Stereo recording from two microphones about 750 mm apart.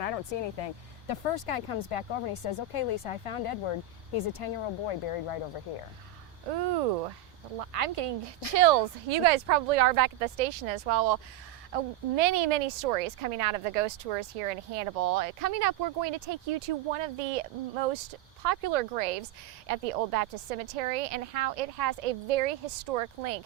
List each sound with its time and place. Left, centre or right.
0.0 s speech: left
6.5 s a woman's voice: right
7.6 s speech: right
8.5 s a woman's voice: right
11.7 s a woman's voice: right